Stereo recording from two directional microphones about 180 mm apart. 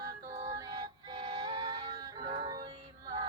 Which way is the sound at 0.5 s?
20° right (ahead or behind).